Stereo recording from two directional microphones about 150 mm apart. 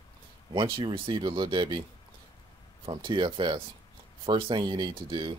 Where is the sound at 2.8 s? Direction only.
35° right (ahead or behind).